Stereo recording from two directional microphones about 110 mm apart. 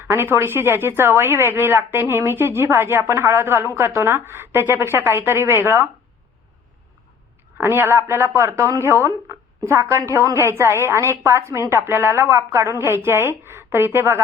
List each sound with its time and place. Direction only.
0.0 s a woman's voice: 20° right (ahead or behind)
7.6 s a woman's voice: 20° right (ahead or behind)